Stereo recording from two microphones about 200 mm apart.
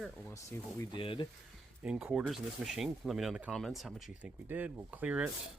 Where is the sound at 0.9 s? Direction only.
25° left (ahead or behind).